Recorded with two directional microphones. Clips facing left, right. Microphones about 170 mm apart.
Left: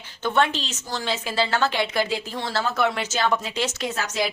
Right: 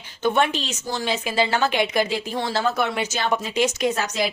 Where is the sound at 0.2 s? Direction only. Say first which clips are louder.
Right 2 dB; 15° right (ahead or behind).